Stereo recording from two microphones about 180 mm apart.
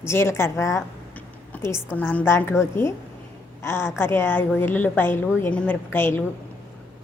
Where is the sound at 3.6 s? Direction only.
15° left (ahead or behind).